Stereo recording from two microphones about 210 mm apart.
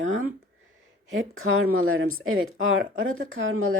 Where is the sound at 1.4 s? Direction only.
75° right (ahead or behind).